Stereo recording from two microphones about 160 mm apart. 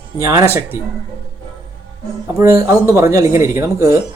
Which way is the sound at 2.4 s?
15° right (ahead or behind).